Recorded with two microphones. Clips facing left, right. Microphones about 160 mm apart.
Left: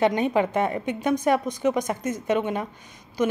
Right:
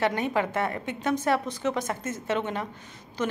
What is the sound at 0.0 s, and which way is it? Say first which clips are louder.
A woman's voice: left 5 dB; 20° left (ahead or behind).